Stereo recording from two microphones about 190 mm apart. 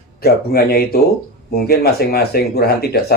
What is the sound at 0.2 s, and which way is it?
A man's voice, 55° left (ahead or behind).